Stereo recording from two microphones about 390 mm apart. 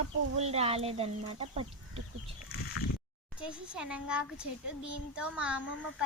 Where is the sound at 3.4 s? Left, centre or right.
Centre.